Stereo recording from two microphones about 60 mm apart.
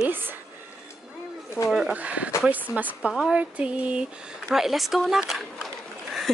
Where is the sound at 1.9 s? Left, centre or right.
Right.